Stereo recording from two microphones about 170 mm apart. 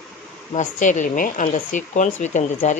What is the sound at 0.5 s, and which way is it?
Speech, 45° left (ahead or behind).